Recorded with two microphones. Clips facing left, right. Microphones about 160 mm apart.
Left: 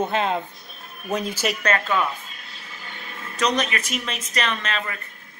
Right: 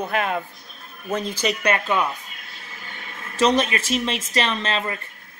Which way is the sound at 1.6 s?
15° right (ahead or behind).